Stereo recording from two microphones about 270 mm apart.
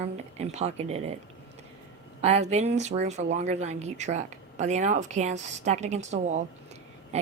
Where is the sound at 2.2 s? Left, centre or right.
Right.